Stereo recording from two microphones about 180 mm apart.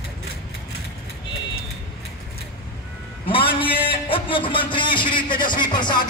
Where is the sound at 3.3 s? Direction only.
30° left (ahead or behind).